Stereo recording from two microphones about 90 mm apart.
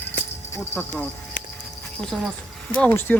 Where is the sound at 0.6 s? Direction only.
20° left (ahead or behind).